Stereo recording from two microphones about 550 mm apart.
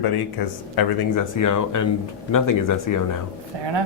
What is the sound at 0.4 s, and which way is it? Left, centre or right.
Speech, left.